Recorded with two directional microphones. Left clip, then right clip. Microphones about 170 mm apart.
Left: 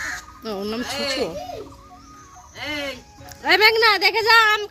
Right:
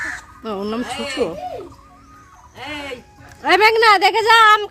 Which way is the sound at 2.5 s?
20° left (ahead or behind).